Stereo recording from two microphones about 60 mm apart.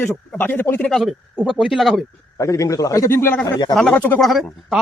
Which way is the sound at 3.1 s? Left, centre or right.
Left.